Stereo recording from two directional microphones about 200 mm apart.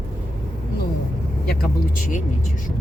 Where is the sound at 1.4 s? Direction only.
45° left (ahead or behind).